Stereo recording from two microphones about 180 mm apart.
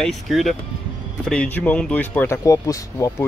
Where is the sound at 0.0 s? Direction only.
Centre (ahead or behind).